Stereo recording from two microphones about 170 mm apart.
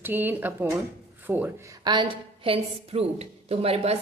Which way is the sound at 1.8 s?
25° right (ahead or behind).